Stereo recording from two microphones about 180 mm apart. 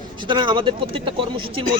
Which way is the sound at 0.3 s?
25° right (ahead or behind).